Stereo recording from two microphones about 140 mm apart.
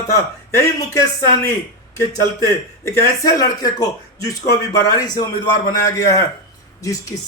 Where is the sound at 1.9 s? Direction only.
25° left (ahead or behind).